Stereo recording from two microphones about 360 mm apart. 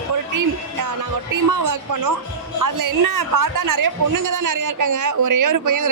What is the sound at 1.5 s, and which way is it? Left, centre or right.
Speech, right.